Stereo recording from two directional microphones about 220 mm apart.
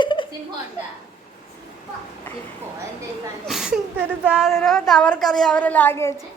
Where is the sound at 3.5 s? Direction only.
Centre (ahead or behind).